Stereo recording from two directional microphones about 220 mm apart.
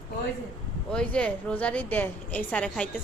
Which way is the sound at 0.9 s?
5° left (ahead or behind).